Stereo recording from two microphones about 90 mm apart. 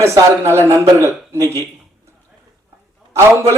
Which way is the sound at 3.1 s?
30° right (ahead or behind).